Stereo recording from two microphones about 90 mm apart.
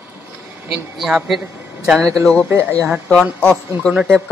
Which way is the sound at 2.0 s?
35° right (ahead or behind).